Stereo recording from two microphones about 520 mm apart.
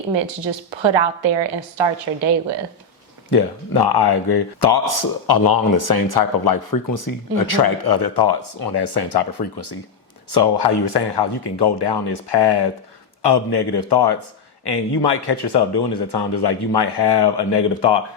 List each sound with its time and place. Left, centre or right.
0.2 s a woman's voice: right
3.2 s speech: left